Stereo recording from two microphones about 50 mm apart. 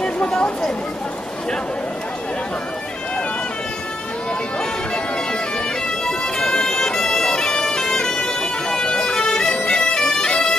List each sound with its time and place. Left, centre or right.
0.0 s a sound: centre
4.6 s music: centre
5.9 s bagpipes: centre